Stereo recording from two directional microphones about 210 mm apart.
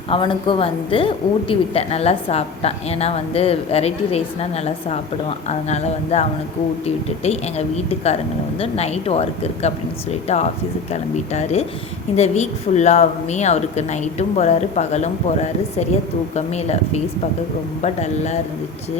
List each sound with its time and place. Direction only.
0.1 s speech: 25° left (ahead or behind)